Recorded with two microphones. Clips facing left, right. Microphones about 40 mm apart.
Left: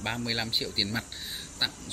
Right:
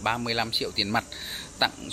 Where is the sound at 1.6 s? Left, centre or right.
Right.